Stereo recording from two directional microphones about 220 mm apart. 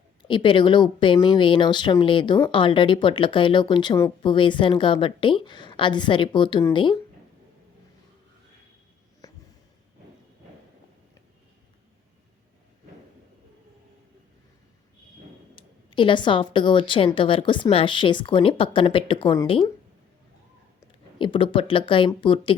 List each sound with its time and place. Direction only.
0.3 s speech: 20° left (ahead or behind)
9.2 s a sound: 15° left (ahead or behind)
15.5 s speech: 20° left (ahead or behind)
21.2 s speech: 20° left (ahead or behind)